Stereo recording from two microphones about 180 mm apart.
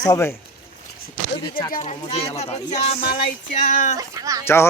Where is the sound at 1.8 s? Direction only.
35° left (ahead or behind).